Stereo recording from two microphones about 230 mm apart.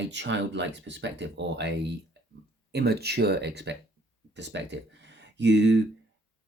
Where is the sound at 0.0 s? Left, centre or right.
Right.